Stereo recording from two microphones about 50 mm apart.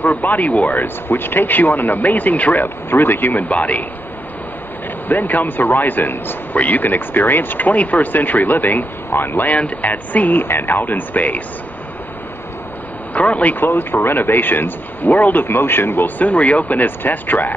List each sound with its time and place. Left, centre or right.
0.0 s speech: left
0.8 s speech: left
2.6 s speech: left
5.0 s speech: left
13.1 s speech: left